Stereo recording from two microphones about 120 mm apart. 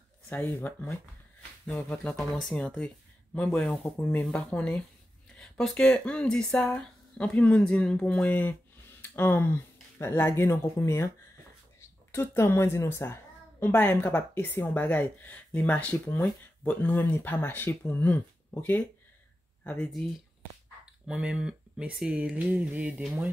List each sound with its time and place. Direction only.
0.3 s a woman's voice: 15° left (ahead or behind)
1.7 s a woman's voice: 5° left (ahead or behind); by 11.1 s 20° left (ahead or behind)
12.1 s a woman's voice: 20° left (ahead or behind)
20.8 s speech: 5° right (ahead or behind)